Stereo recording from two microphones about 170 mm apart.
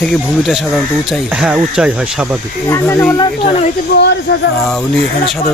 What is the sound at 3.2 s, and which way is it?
Speech, 30° left (ahead or behind).